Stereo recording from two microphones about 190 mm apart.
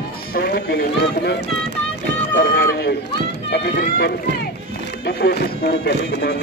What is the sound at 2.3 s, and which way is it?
Speech, 50° left (ahead or behind).